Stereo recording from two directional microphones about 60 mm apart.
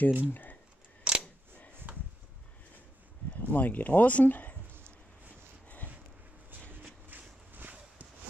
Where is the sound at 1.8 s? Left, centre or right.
Right.